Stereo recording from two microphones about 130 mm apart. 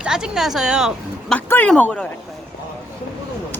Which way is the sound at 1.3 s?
15° left (ahead or behind).